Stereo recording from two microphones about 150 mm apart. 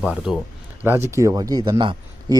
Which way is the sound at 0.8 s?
15° right (ahead or behind).